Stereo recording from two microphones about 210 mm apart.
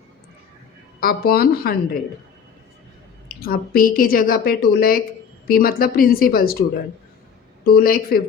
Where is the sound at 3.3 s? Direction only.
45° left (ahead or behind).